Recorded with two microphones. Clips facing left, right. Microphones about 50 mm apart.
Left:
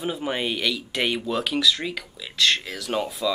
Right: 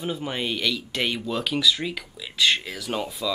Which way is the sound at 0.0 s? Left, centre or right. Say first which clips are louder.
Left 2 dB; centre.